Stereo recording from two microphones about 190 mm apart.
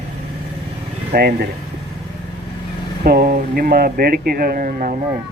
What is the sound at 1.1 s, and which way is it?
Speech, 55° right (ahead or behind).